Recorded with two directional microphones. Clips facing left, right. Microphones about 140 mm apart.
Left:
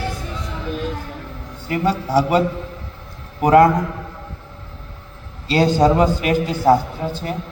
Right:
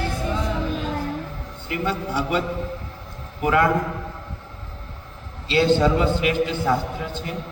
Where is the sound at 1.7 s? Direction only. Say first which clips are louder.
Left 5 dB; 40° left (ahead or behind).